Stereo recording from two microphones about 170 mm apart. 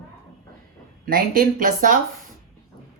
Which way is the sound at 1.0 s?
55° right (ahead or behind).